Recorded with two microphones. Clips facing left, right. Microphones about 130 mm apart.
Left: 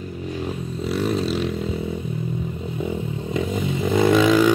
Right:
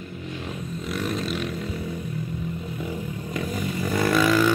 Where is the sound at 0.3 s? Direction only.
30° left (ahead or behind).